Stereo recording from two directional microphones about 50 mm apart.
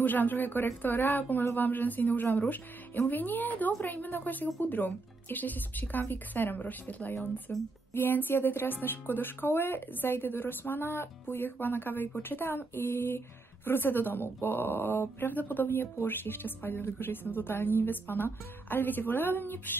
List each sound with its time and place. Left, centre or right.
0.0 s speech: left